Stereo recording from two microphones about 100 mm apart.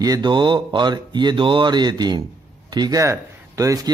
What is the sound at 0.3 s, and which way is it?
Speech, 55° right (ahead or behind).